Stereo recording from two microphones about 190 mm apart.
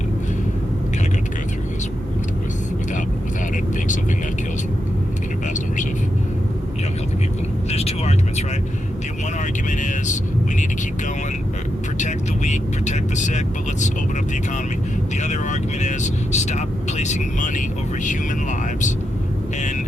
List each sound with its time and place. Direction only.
7.7 s vehicle: 35° left (ahead or behind)
11.9 s vehicle: 40° left (ahead or behind)
15.2 s vehicle: 40° left (ahead or behind)